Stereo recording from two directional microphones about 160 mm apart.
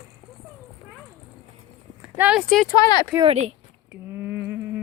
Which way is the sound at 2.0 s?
5° right (ahead or behind).